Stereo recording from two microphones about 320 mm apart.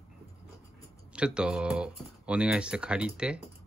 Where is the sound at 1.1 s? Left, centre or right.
Centre.